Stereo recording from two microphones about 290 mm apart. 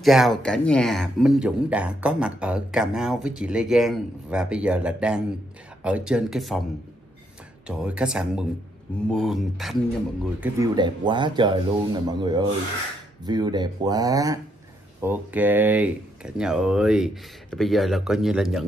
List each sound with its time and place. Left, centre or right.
0.0 s speech: centre
7.6 s speech: centre
10.4 s speech: centre